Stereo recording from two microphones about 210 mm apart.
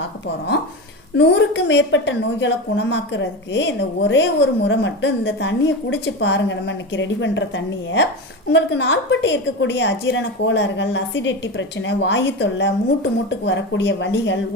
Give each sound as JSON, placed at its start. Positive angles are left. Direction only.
{"t": 1.1, "sound": "a woman's voice", "side_deg": 55}